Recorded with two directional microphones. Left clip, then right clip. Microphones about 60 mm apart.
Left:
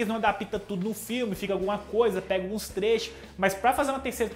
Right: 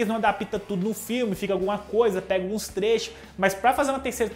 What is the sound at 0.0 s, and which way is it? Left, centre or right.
Speech, right.